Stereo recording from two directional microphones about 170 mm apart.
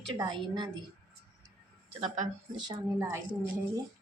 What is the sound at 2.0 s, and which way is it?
Speech, 45° right (ahead or behind).